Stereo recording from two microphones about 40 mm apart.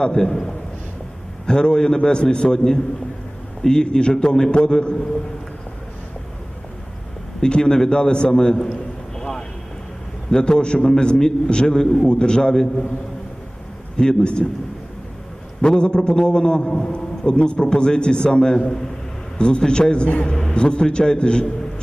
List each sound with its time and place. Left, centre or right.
0.0 s a man's voice: centre
7.4 s a man's voice: centre
9.1 s vehicle: centre
10.3 s a man's voice: left
13.9 s a man's voice: left
15.6 s a man's voice: left
20.5 s a man's voice: left